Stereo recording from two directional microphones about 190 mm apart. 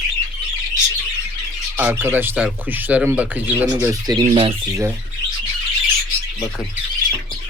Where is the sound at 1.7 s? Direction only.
10° right (ahead or behind).